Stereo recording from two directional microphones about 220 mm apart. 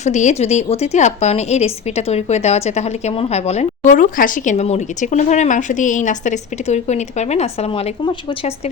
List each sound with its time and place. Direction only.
0.0 s a woman's voice: 30° left (ahead or behind)